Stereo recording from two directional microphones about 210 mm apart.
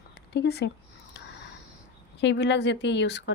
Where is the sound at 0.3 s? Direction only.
50° left (ahead or behind).